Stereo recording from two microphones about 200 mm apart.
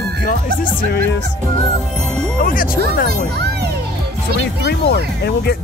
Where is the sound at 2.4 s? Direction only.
45° left (ahead or behind).